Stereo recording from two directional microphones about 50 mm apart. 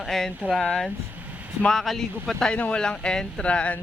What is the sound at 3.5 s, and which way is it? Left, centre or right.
Speech, left.